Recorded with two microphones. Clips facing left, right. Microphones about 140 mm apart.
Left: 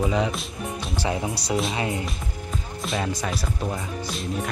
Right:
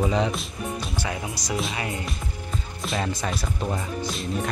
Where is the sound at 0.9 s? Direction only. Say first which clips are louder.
Left 4 dB; 25° left (ahead or behind).